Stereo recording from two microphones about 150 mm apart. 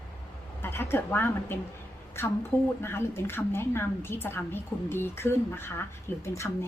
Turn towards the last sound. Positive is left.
turn(degrees=20)  # may be behind; listen again after turning